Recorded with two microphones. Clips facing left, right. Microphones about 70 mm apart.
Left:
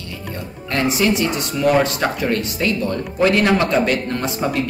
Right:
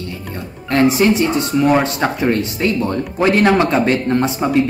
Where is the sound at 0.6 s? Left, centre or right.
Right.